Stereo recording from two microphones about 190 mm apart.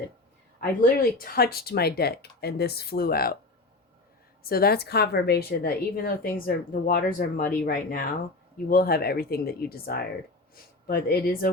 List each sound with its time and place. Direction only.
0.8 s speech: 50° left (ahead or behind)
4.4 s a woman's voice: 55° left (ahead or behind)